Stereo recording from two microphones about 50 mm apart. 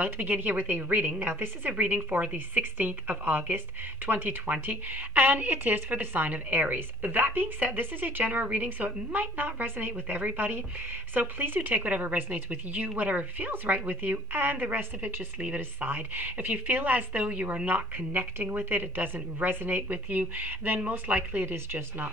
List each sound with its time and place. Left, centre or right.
0.0 s a woman's voice: right
1.7 s a woman's voice: right